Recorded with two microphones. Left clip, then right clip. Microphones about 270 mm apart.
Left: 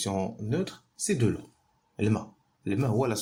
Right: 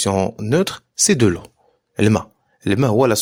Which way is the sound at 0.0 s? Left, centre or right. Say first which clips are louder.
Right 12 dB; right.